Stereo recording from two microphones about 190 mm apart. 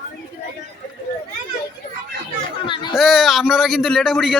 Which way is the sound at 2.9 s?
Centre (ahead or behind).